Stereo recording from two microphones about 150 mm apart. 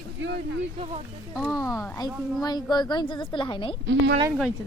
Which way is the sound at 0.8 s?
45° right (ahead or behind).